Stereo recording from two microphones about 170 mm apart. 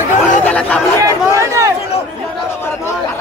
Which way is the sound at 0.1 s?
45° left (ahead or behind).